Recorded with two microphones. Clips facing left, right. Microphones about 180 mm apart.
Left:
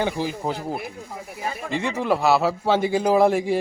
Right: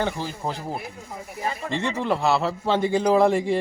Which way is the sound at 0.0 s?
10° left (ahead or behind).